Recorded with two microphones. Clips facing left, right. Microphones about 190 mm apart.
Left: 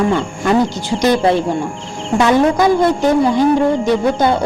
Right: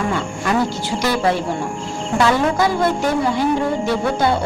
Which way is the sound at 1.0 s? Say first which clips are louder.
Left 6 dB; 20° left (ahead or behind).